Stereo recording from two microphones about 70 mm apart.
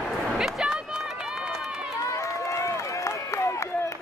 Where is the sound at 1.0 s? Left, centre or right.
Centre.